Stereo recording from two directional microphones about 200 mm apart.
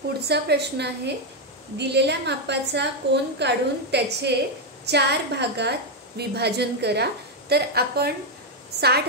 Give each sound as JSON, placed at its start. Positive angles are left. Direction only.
{"t": 0.3, "sound": "a woman's voice", "side_deg": -55}